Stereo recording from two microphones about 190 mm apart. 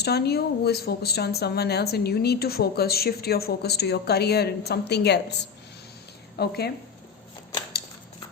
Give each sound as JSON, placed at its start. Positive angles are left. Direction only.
{"t": 0.0, "sound": "speech", "side_deg": 60}